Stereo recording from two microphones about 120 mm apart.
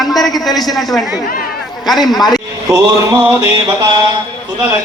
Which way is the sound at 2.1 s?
35° left (ahead or behind).